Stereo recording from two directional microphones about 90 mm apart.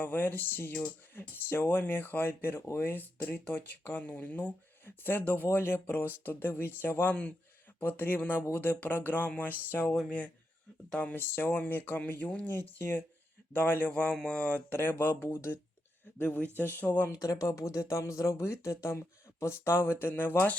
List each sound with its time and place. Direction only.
0.0 s speech: 20° left (ahead or behind)
9.8 s speech: 5° left (ahead or behind)
10.9 s speech: 20° left (ahead or behind)
17.1 s speech: 40° left (ahead or behind)